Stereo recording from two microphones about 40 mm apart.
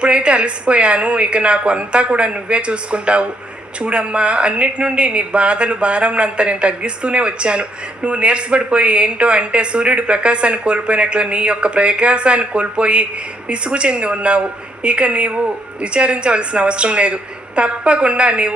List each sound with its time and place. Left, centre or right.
0.0 s a woman's voice: right